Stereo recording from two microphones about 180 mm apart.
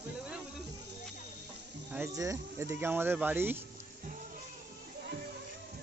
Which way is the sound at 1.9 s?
15° right (ahead or behind).